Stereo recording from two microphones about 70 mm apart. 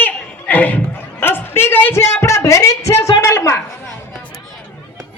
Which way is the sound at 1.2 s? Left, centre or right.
Left.